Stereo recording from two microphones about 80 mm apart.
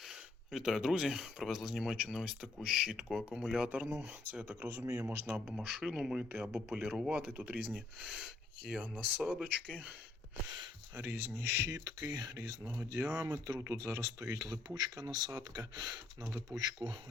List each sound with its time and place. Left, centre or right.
0.1 s speech: centre
3.8 s speech: right
4.2 s speech: right
5.5 s speech: centre
8.0 s speech: centre
10.9 s speech: right